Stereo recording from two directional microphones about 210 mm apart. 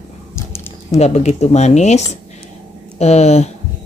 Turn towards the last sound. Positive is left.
turn(degrees=30)  # may be behind; listen again after turning